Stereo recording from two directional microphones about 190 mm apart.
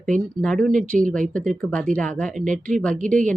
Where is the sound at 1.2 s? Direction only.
40° right (ahead or behind).